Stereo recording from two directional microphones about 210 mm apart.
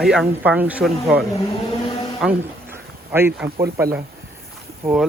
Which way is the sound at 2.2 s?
10° right (ahead or behind).